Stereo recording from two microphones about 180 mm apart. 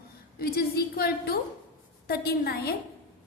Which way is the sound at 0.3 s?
55° left (ahead or behind).